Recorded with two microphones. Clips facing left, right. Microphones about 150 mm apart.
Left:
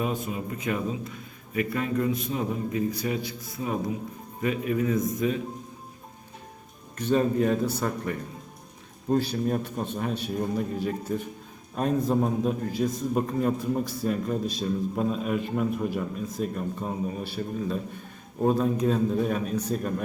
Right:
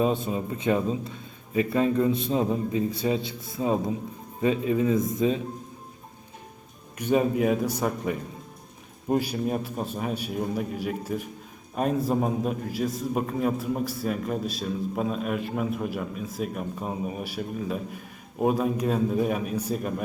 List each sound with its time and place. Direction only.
0.0 s a man's voice: 30° right (ahead or behind)
6.9 s a man's voice: 10° right (ahead or behind)